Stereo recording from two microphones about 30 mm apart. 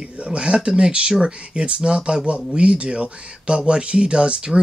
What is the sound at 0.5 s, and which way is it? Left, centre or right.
Speech, right.